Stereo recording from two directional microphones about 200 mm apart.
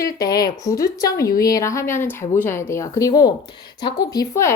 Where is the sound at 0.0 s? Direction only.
20° left (ahead or behind).